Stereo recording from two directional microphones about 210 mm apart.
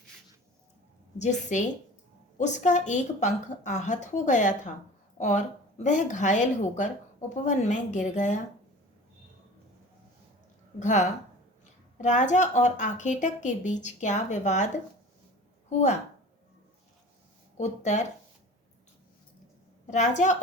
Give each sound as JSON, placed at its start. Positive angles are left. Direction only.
{"t": 1.2, "sound": "a woman's voice", "side_deg": 35}
{"t": 10.8, "sound": "a woman's voice", "side_deg": 35}
{"t": 17.6, "sound": "a woman's voice", "side_deg": 35}
{"t": 19.9, "sound": "a woman's voice", "side_deg": 35}